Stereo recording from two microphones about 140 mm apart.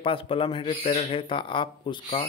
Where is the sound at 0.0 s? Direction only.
40° left (ahead or behind).